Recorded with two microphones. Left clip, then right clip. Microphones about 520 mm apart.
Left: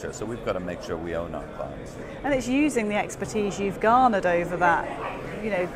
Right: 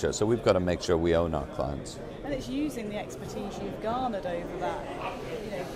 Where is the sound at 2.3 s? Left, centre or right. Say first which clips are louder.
Left 10 dB; left.